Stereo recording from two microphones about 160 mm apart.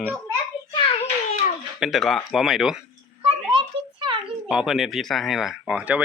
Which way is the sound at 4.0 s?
30° right (ahead or behind).